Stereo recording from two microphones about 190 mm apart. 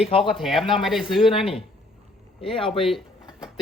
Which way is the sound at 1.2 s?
30° left (ahead or behind).